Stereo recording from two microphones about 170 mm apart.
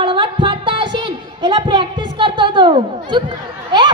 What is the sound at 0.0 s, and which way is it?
Music, 30° right (ahead or behind).